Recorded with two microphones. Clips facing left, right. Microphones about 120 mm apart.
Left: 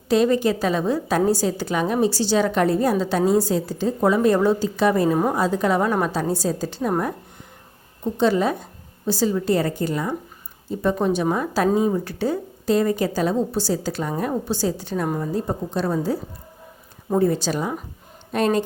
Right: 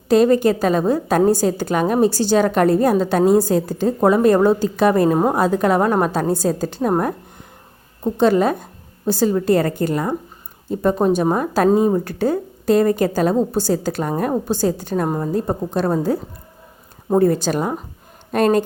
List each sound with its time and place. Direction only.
0.1 s a woman's voice: 45° right (ahead or behind)
8.0 s a woman's voice: 50° right (ahead or behind)
17.2 s a woman's voice: 50° right (ahead or behind)